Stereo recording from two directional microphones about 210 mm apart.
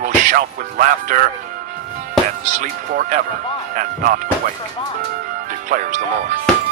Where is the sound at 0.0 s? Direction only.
40° right (ahead or behind).